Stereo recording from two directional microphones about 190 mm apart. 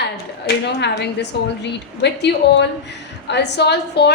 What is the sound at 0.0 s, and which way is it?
A woman's voice, 60° left (ahead or behind).